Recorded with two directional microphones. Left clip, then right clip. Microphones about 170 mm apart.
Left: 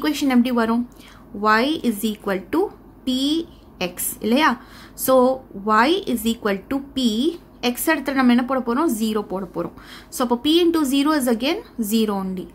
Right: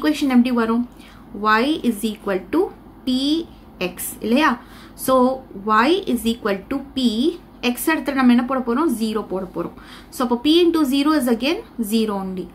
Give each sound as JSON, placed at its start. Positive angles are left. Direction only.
{"t": 0.0, "sound": "a woman's voice", "side_deg": 35}